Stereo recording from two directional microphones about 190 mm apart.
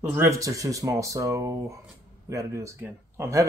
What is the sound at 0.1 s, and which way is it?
Speech, 15° right (ahead or behind).